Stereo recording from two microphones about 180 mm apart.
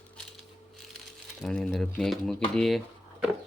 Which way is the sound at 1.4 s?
Centre (ahead or behind).